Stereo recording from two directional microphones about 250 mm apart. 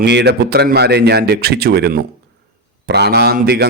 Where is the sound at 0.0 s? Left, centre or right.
Right.